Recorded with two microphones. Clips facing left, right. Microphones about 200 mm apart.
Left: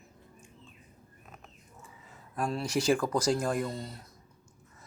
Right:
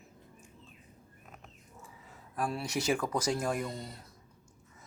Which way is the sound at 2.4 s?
5° right (ahead or behind).